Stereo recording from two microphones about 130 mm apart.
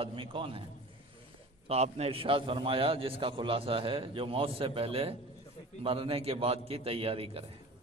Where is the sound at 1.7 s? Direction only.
50° right (ahead or behind).